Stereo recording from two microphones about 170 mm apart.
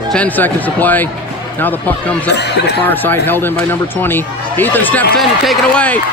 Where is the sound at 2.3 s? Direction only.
80° left.